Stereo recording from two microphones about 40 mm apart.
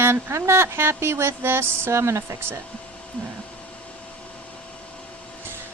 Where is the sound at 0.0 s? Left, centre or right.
Right.